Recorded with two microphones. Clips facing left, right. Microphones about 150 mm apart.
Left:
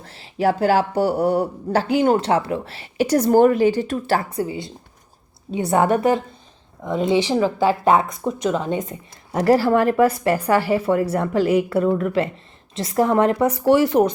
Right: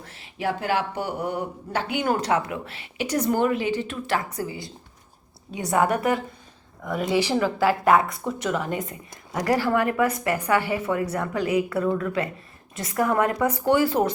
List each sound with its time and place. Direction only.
0.0 s speech: 30° left (ahead or behind)
4.3 s speech: 20° left (ahead or behind)